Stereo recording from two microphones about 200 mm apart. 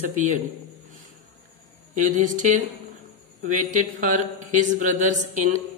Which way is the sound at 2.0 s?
40° right (ahead or behind).